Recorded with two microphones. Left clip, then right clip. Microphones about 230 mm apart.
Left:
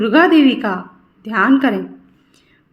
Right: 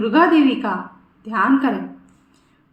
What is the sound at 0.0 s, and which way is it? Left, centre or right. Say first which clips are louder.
A woman's voice: left 3 dB; left.